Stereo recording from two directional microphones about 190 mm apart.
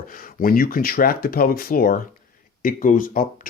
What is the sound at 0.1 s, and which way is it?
Speech, 50° left (ahead or behind).